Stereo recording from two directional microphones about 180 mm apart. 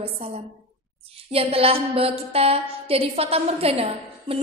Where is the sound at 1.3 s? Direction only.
30° right (ahead or behind).